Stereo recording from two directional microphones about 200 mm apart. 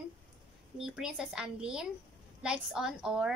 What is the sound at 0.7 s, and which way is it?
A woman's voice, 5° right (ahead or behind).